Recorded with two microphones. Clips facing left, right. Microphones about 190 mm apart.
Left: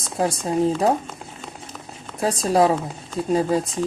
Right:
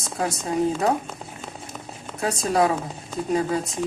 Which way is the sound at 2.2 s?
30° left (ahead or behind).